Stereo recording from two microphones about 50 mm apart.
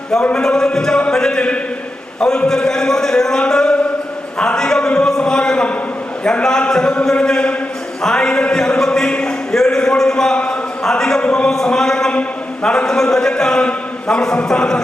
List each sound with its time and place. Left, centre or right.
0.3 s a man's voice: centre